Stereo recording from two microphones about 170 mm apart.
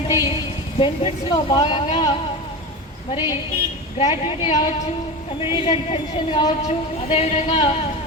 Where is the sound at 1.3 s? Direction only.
30° left (ahead or behind).